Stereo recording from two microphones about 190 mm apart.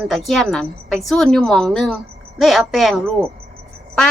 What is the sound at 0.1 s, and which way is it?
A woman's voice, centre (ahead or behind).